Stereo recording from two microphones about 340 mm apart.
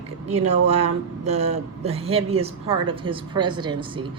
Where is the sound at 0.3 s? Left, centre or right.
Centre.